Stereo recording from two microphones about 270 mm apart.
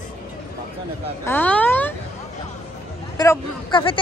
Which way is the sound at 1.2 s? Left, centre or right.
Centre.